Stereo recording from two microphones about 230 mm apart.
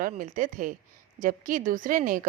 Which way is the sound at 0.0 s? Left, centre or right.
Right.